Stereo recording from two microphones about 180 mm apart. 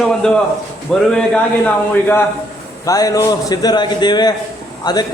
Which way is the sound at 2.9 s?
20° left (ahead or behind).